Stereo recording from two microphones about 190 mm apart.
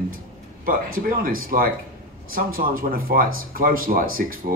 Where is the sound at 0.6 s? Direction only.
50° right (ahead or behind).